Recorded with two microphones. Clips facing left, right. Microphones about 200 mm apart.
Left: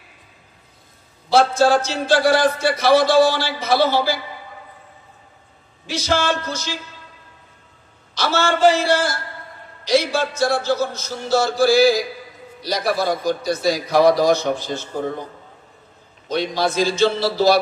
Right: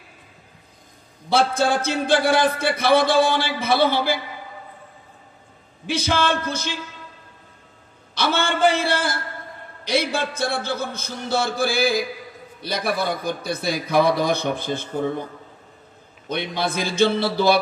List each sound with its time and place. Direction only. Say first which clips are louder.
1.3 s a man's voice: left 4 dB; 55° right (ahead or behind)
5.9 s a man's voice: left 1 dB; 55° right (ahead or behind)
8.1 s a man's voice: left 2 dB; 55° right (ahead or behind)
16.3 s a man's voice: left 4 dB; 55° right (ahead or behind)